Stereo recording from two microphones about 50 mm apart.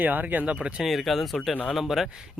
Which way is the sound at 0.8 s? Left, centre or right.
Centre.